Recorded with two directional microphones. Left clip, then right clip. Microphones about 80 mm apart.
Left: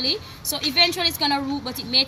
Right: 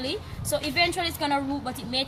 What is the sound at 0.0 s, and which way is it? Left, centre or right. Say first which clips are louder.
A woman's voice: left 7 dB; right.